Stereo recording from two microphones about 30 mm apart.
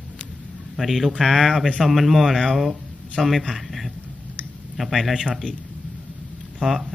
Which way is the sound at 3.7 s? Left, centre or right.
Centre.